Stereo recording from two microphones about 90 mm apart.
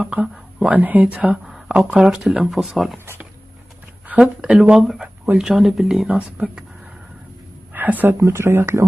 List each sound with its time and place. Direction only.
0.0 s speech: 15° right (ahead or behind)
4.1 s speech: 15° right (ahead or behind)
7.7 s speech: 20° right (ahead or behind)